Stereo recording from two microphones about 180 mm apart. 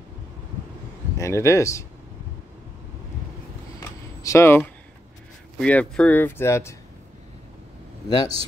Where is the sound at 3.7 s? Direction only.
15° left (ahead or behind).